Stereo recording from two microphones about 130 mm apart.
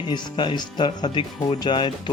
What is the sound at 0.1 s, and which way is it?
Speech, 35° left (ahead or behind).